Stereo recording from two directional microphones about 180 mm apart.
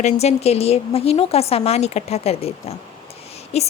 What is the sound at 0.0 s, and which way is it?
A woman's voice, 35° left (ahead or behind).